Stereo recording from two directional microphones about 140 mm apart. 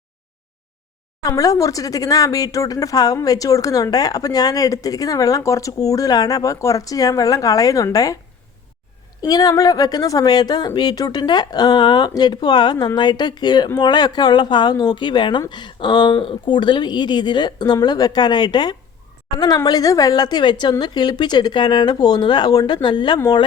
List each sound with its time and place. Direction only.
1.2 s speech: 25° left (ahead or behind)
9.2 s speech: 30° left (ahead or behind)